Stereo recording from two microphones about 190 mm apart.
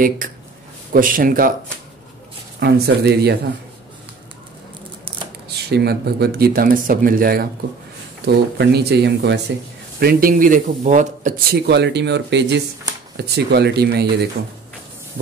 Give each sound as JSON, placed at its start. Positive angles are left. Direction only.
{"t": 0.2, "sound": "a sound", "side_deg": -45}
{"t": 0.9, "sound": "speech", "side_deg": -45}
{"t": 2.6, "sound": "speech", "side_deg": -60}
{"t": 5.7, "sound": "speech", "side_deg": -60}
{"t": 9.9, "sound": "speech", "side_deg": -50}
{"t": 11.6, "sound": "speech", "side_deg": -60}